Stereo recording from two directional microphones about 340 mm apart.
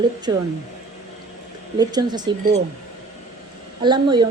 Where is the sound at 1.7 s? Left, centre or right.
Centre.